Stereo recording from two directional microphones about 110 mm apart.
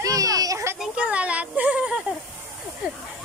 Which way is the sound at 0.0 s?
30° right (ahead or behind).